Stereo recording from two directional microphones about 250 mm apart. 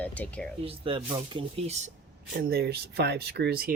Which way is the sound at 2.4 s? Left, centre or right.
Right.